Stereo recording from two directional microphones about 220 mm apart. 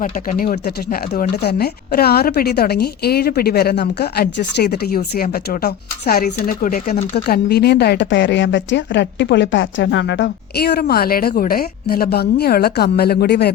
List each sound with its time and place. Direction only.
0.0 s speech: 40° left (ahead or behind)